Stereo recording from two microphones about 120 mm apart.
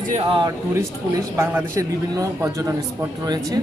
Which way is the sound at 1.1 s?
20° right (ahead or behind).